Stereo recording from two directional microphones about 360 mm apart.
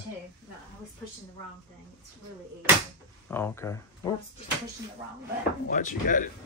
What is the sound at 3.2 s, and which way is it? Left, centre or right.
Speech, centre.